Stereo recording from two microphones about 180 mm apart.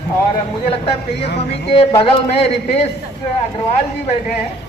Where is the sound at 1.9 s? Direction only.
30° left (ahead or behind).